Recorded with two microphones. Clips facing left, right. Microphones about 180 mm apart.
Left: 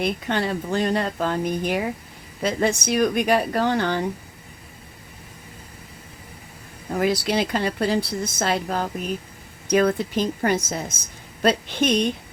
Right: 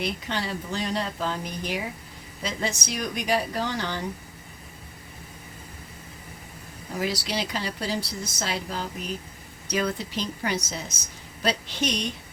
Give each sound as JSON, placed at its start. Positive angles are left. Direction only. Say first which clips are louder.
{"t": 0.0, "sound": "speech", "louder": "left 6 dB", "side_deg": 55}
{"t": 6.9, "sound": "speech", "louder": "left 7 dB", "side_deg": 55}